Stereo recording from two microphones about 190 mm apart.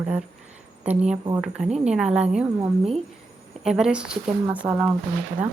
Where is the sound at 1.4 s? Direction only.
5° right (ahead or behind).